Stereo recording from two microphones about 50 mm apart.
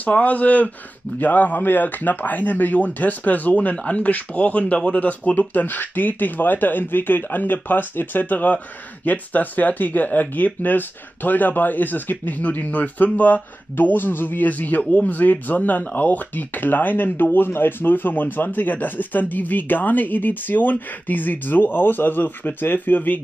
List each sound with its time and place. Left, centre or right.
0.0 s speech: left